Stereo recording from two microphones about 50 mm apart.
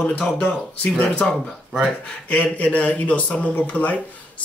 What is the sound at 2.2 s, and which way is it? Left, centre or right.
Speech, left.